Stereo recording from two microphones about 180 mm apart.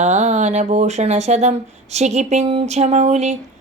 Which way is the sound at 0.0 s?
40° right (ahead or behind).